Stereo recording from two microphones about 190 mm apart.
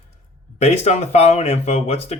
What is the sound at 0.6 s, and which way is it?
Speech, 35° left (ahead or behind).